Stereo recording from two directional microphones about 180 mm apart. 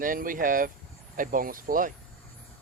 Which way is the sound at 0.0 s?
50° right (ahead or behind).